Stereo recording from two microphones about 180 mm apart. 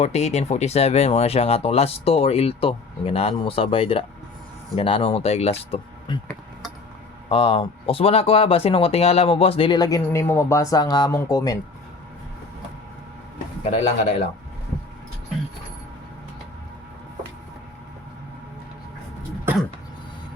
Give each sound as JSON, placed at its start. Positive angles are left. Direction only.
{"t": 0.0, "sound": "speech", "side_deg": 40}
{"t": 7.3, "sound": "speech", "side_deg": 30}
{"t": 13.7, "sound": "speech", "side_deg": 40}